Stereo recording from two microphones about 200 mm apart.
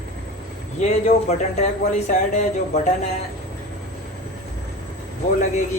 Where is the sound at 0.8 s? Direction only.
35° left (ahead or behind).